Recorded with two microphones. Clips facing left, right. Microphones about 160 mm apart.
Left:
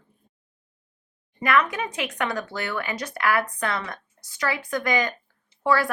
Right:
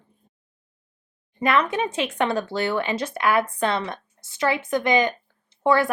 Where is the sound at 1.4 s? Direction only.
25° right (ahead or behind).